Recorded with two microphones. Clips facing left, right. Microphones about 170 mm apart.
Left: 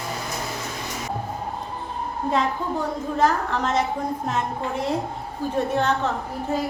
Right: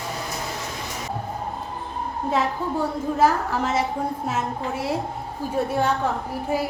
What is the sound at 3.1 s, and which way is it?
A woman's voice, 5° right (ahead or behind).